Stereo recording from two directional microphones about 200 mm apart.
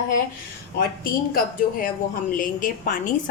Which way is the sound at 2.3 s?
40° left (ahead or behind).